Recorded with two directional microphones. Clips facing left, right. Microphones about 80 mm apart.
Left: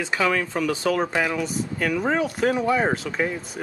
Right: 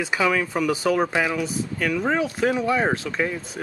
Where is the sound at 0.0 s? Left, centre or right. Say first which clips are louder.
Right 1 dB; centre.